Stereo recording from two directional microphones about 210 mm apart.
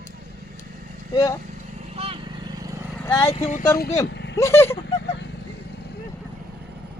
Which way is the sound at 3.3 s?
30° left (ahead or behind).